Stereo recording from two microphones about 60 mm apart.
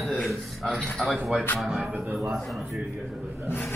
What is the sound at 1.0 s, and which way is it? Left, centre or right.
Speech, centre.